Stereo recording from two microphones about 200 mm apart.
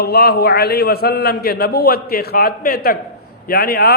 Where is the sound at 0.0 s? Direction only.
50° left (ahead or behind).